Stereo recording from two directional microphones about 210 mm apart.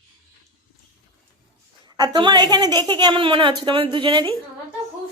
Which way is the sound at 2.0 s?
20° right (ahead or behind).